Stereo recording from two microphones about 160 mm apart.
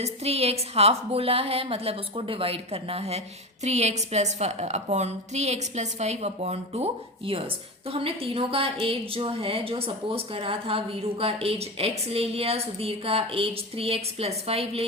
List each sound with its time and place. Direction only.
0.0 s a woman's voice: 40° right (ahead or behind)